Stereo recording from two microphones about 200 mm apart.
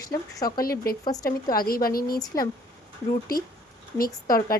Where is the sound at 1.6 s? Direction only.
45° left (ahead or behind).